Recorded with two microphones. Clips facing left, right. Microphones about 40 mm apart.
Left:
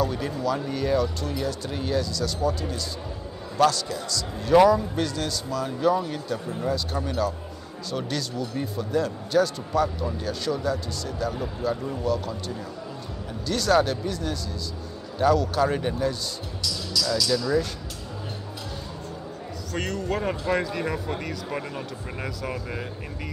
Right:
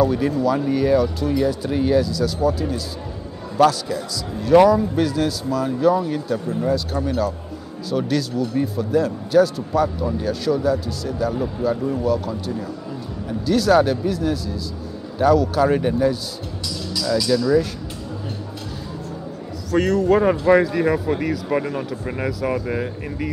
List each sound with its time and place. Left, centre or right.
0.0 s a man's voice: centre
16.6 s music: centre
17.1 s a man's voice: centre
19.7 s a man's voice: centre
20.2 s speech: centre
20.6 s a man's voice: centre